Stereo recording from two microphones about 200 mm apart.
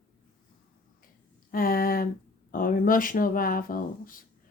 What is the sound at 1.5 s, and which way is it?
Speech, 45° left (ahead or behind).